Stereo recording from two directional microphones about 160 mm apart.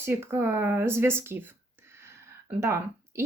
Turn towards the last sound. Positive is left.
turn(degrees=-15)  # may be behind; listen again after turning